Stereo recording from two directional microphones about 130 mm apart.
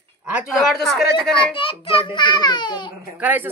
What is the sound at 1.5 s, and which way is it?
A child's voice, 45° left (ahead or behind).